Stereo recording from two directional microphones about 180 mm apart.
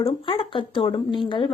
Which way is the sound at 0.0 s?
30° left (ahead or behind).